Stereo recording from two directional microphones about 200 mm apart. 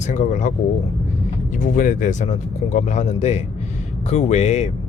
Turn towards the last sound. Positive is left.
turn(degrees=35)  # may be behind; listen again after turning